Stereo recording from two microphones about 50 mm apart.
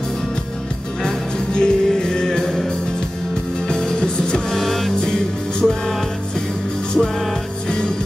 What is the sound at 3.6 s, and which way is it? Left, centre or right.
Music, centre.